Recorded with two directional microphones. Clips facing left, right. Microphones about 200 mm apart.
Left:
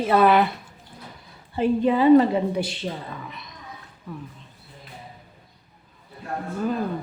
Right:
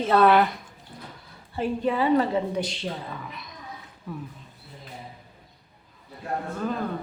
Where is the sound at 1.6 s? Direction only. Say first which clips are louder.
Left 5 dB; 20° left (ahead or behind).